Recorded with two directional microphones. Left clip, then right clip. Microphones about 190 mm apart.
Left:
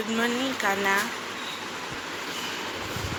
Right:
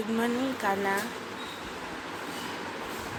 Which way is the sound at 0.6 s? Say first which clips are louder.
Left 5 dB; centre (ahead or behind).